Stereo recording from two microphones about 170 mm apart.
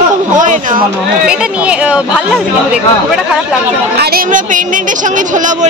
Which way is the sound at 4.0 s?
60° right (ahead or behind).